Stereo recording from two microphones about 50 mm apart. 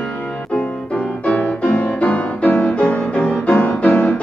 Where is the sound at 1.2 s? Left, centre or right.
Left.